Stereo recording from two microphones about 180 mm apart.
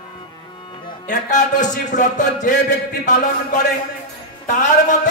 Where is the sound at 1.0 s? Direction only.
40° left (ahead or behind).